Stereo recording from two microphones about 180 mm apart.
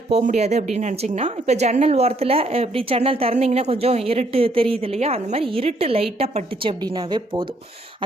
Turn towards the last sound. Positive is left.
turn(degrees=-25)  # may be behind; listen again after turning